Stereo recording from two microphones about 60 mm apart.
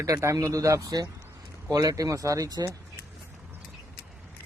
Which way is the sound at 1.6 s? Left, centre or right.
Right.